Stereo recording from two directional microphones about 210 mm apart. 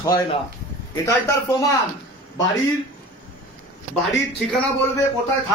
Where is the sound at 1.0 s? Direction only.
15° left (ahead or behind).